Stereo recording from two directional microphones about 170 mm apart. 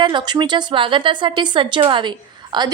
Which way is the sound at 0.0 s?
25° right (ahead or behind).